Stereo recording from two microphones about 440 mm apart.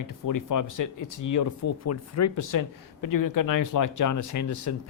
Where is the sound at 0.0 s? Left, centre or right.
Left.